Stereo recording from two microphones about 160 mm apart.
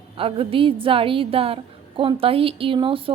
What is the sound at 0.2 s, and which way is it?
A woman's voice, 35° right (ahead or behind).